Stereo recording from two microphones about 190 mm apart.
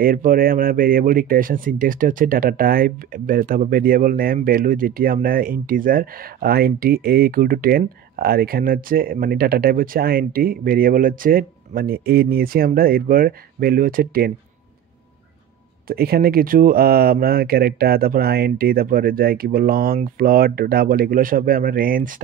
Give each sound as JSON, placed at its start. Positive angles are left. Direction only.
{"t": 0.0, "sound": "speech", "side_deg": -50}
{"t": 15.9, "sound": "speech", "side_deg": -55}